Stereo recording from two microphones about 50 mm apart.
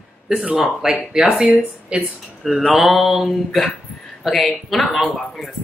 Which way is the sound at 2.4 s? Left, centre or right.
Centre.